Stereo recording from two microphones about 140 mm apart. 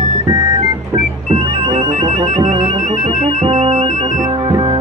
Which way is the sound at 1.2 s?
45° right (ahead or behind).